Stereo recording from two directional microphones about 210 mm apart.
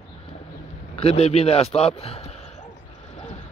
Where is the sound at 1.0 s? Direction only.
30° left (ahead or behind).